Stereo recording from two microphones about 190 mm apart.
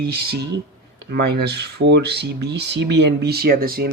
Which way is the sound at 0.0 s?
55° right (ahead or behind).